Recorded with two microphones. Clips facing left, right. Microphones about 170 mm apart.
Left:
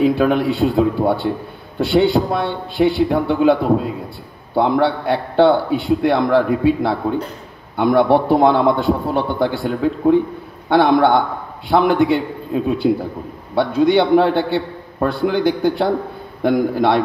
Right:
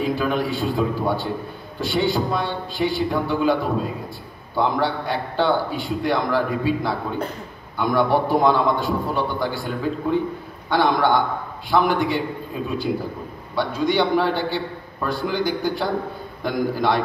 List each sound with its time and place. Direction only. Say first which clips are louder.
0.0 s a man's voice: left 7 dB; 60° left (ahead or behind)
4.6 s a man's voice: left 6 dB; 60° left (ahead or behind)